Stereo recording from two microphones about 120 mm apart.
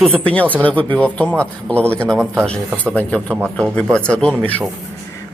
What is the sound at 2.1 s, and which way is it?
Speech, 15° right (ahead or behind).